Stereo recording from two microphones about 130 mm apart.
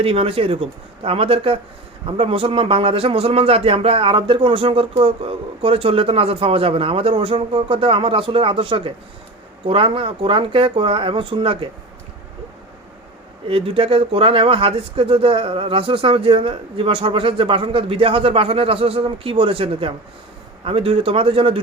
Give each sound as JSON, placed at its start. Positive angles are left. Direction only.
{"t": 0.0, "sound": "speech", "side_deg": -45}
{"t": 13.5, "sound": "speech", "side_deg": -45}